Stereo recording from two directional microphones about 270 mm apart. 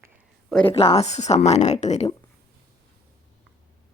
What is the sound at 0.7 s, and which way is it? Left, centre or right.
Speech, left.